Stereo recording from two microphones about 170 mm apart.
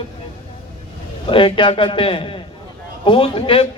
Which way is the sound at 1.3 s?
30° left (ahead or behind).